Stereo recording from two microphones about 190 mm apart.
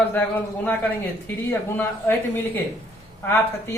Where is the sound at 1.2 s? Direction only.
10° left (ahead or behind).